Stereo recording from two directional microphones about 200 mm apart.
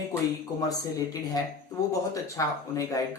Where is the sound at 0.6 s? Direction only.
20° left (ahead or behind).